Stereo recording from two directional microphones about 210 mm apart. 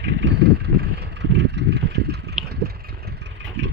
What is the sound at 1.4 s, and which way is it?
Vehicle, 55° right (ahead or behind).